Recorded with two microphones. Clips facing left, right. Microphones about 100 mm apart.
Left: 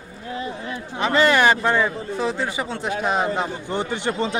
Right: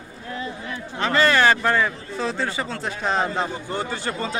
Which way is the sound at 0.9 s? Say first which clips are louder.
Left 1 dB; 15° left (ahead or behind).